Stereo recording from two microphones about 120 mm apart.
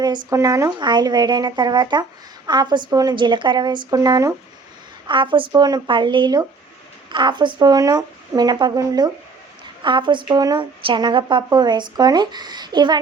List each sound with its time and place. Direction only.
0.0 s speech: 35° right (ahead or behind)
5.0 s speech: 40° right (ahead or behind)